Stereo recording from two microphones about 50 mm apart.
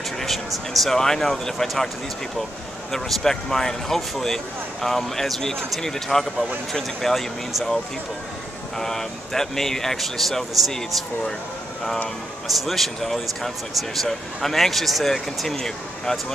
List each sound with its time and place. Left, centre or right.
0.2 s speech: centre
2.9 s speech: centre
12.4 s speech: centre